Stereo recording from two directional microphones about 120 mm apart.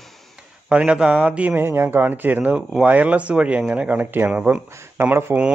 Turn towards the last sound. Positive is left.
turn(degrees=-20)  # may be behind; listen again after turning